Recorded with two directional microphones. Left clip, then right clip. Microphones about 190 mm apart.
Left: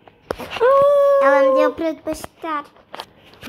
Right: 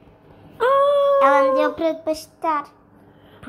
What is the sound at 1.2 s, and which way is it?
A woman's voice, centre (ahead or behind).